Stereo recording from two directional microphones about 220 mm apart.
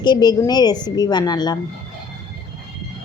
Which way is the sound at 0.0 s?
20° left (ahead or behind).